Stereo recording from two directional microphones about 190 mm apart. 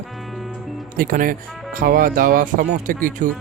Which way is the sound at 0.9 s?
45° right (ahead or behind).